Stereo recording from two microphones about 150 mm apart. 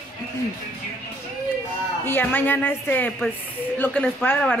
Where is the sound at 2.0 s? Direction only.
15° left (ahead or behind).